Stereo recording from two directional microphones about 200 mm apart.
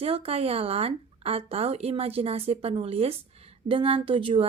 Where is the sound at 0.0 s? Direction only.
30° right (ahead or behind).